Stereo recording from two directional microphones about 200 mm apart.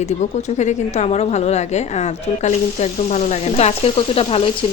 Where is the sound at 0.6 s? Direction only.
35° left (ahead or behind).